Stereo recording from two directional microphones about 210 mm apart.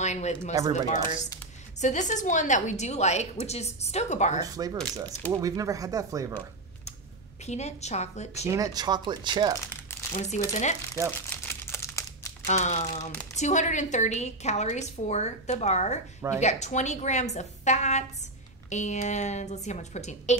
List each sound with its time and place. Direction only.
0.0 s a woman's voice: 35° left (ahead or behind)
4.4 s speech: 15° right (ahead or behind)
7.4 s a woman's voice: 30° left (ahead or behind)
8.5 s speech: 15° right (ahead or behind)
10.1 s a woman's voice: 35° left (ahead or behind)
11.2 s crumpling: 10° left (ahead or behind)
12.4 s a woman's voice: 35° left (ahead or behind)